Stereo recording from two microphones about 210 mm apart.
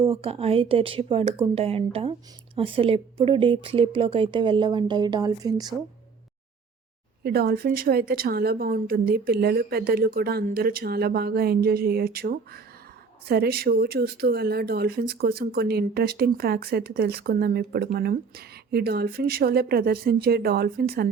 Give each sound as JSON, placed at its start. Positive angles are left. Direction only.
{"t": 0.0, "sound": "speech", "side_deg": -25}
{"t": 7.3, "sound": "speech", "side_deg": -45}